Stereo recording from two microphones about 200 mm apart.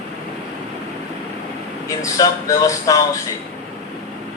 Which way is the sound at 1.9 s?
15° left (ahead or behind).